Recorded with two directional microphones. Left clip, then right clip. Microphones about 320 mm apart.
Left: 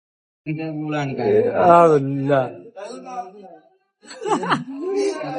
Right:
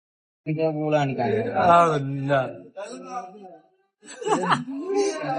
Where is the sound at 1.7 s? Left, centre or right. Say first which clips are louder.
Left 5 dB; left.